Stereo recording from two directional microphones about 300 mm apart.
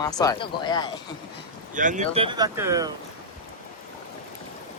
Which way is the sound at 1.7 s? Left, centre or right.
Right.